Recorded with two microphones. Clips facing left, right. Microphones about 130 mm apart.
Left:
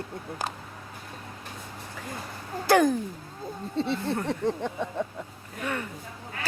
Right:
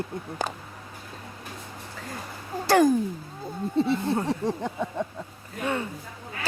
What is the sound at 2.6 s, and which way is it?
Speech, centre (ahead or behind).